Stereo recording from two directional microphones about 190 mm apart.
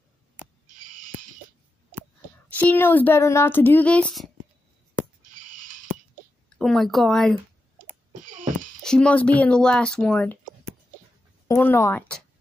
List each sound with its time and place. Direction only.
2.5 s speech: 10° left (ahead or behind)
6.6 s speech: centre (ahead or behind)
8.3 s a sound: 45° right (ahead or behind)
8.8 s speech: 5° left (ahead or behind)
11.4 s speech: 15° left (ahead or behind)